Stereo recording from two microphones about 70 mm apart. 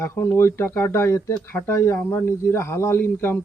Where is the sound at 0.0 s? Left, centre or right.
Left.